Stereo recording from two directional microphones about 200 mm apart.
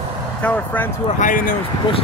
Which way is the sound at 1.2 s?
40° left (ahead or behind).